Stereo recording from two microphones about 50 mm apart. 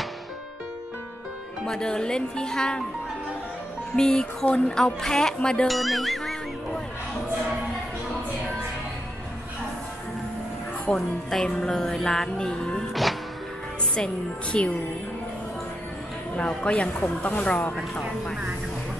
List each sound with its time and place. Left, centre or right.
1.7 s music: centre
3.9 s music: centre
4.5 s speech: left
4.7 s music: centre
5.7 s music: centre
11.0 s music: centre
13.9 s speech: left
16.3 s speech: left